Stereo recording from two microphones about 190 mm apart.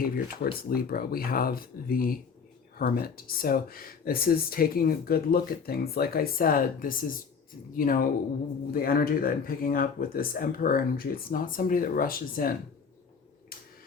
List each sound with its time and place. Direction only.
0.0 s speech: 50° left (ahead or behind)